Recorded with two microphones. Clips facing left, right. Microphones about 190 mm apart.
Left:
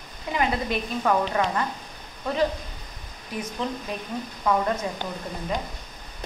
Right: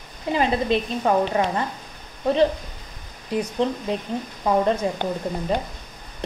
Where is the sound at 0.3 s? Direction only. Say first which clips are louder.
Right 5 dB; 25° right (ahead or behind).